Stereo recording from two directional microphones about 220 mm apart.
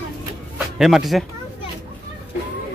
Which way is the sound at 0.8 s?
Centre (ahead or behind).